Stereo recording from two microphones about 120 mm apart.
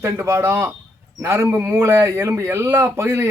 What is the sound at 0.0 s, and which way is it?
Speech, 20° right (ahead or behind).